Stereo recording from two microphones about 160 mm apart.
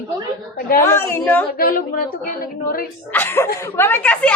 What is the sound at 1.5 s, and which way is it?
Speech, 65° left (ahead or behind).